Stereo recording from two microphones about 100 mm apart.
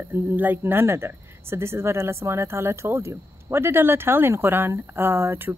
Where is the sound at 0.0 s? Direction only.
20° right (ahead or behind).